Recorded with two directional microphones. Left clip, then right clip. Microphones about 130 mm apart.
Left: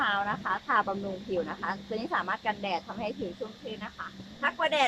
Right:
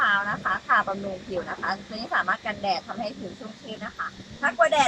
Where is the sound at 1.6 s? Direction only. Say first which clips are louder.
Right 4 dB; 35° left (ahead or behind).